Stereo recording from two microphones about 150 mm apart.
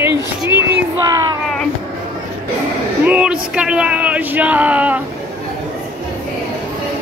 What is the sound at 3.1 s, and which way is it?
Speech, 5° right (ahead or behind).